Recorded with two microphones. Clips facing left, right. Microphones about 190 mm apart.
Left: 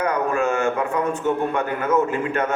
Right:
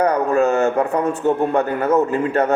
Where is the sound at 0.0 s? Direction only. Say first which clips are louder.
Right 5 dB; 35° right (ahead or behind).